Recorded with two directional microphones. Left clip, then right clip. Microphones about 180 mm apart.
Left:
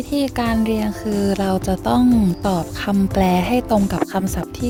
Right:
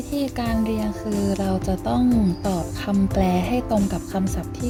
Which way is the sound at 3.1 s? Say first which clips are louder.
Left 5 dB; 50° left (ahead or behind).